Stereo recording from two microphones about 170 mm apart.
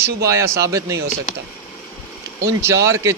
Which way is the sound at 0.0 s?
15° right (ahead or behind).